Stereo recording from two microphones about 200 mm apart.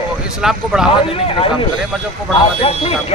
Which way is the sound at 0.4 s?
Centre (ahead or behind).